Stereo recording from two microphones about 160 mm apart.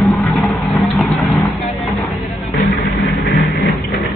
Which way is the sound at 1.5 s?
Centre (ahead or behind).